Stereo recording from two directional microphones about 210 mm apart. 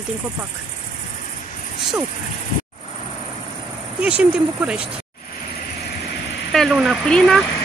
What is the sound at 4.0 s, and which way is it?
Speech, 5° right (ahead or behind).